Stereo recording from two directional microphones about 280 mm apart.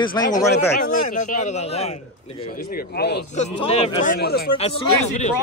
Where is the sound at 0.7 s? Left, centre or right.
Left.